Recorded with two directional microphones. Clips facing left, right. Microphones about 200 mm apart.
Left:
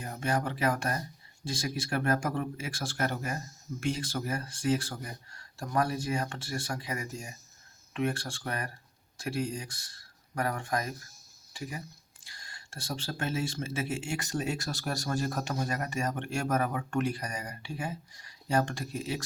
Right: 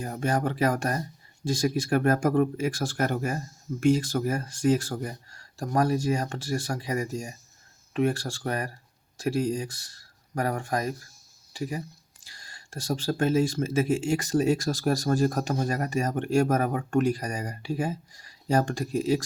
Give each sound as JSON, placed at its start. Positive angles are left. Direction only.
{"t": 0.0, "sound": "speech", "side_deg": -45}